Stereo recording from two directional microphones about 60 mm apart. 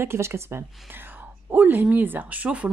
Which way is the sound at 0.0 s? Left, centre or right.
Right.